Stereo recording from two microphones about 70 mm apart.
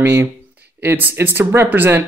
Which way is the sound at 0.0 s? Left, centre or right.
Right.